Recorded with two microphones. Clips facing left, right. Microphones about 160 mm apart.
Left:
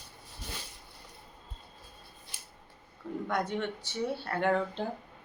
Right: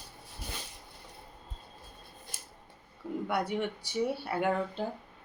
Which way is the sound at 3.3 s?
10° right (ahead or behind).